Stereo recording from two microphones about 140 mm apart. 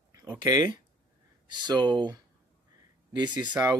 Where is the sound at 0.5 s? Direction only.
30° right (ahead or behind).